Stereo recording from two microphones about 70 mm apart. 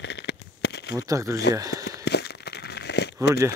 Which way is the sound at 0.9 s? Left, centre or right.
Right.